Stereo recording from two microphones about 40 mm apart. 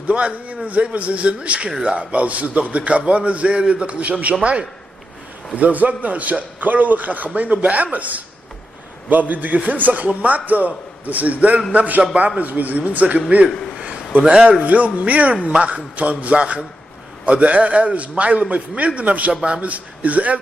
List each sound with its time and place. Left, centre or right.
0.1 s a man's voice: right
5.6 s a man's voice: right
13.7 s a sound: right
14.3 s a man's voice: right
14.6 s a man's voice: right